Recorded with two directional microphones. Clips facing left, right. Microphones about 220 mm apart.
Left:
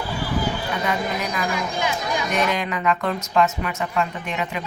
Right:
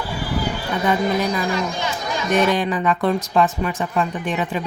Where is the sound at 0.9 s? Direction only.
35° right (ahead or behind).